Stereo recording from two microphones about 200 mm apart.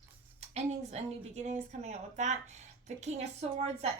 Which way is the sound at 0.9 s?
35° right (ahead or behind).